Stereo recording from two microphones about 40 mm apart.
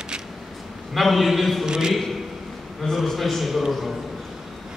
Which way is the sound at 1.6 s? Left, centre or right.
Centre.